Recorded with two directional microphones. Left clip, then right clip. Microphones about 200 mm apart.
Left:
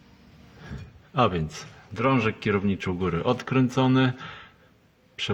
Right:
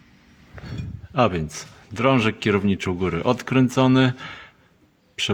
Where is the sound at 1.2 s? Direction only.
15° right (ahead or behind).